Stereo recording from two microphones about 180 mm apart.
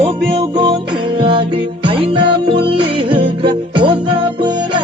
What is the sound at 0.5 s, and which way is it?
Music, 25° right (ahead or behind).